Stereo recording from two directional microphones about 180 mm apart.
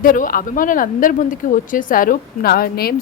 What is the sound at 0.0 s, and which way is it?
Speech, 50° left (ahead or behind).